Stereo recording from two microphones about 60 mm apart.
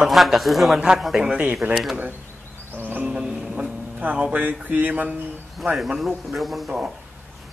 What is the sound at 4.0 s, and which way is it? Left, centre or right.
Speech, right.